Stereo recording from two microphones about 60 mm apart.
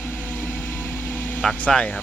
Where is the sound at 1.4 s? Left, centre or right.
Centre.